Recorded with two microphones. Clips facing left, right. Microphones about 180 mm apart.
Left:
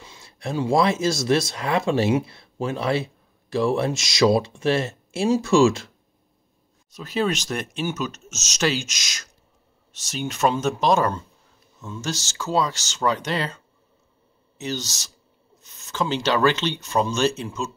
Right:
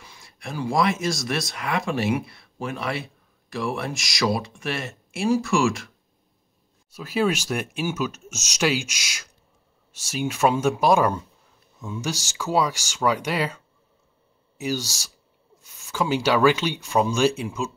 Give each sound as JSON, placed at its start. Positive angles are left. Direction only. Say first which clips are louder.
{"t": 0.0, "sound": "speech", "louder": "left 6 dB", "side_deg": 25}
{"t": 6.9, "sound": "speech", "louder": "right 1 dB", "side_deg": -10}
{"t": 14.6, "sound": "speech", "louder": "right 2 dB", "side_deg": -10}